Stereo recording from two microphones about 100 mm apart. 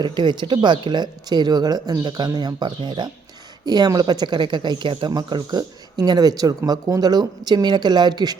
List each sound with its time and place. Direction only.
0.0 s speech: 50° right (ahead or behind)